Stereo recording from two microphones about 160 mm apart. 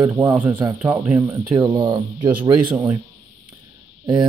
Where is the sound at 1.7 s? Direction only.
30° right (ahead or behind).